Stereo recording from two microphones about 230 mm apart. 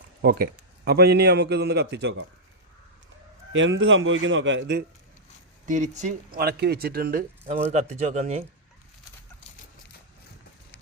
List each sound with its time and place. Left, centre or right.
0.2 s a man's voice: right
3.5 s speech: right
5.6 s speech: right